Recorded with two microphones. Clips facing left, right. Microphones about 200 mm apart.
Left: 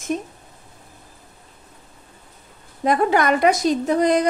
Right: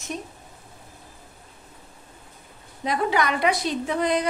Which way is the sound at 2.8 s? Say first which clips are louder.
Left 5 dB; 50° left (ahead or behind).